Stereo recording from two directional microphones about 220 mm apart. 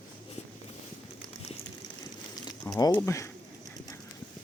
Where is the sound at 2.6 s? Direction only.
15° left (ahead or behind).